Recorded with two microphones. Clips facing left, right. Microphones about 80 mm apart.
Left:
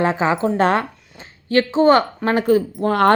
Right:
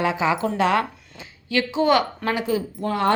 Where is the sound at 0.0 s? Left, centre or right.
Left.